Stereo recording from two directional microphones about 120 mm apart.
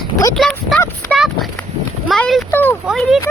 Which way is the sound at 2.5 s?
15° left (ahead or behind).